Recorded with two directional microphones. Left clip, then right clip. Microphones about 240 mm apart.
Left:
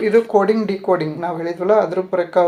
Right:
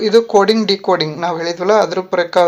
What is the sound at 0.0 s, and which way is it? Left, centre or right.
A man's voice, right.